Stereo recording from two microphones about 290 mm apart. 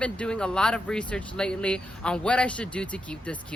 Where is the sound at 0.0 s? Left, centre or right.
Centre.